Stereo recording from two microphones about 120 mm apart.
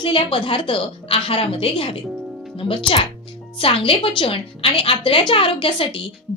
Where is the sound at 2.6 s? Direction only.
45° left (ahead or behind).